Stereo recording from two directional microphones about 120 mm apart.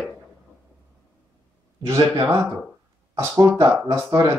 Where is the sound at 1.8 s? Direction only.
25° right (ahead or behind).